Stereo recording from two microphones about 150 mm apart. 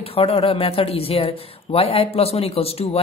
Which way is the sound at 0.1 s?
40° left (ahead or behind).